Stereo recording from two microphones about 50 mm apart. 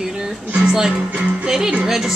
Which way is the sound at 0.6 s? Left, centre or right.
Centre.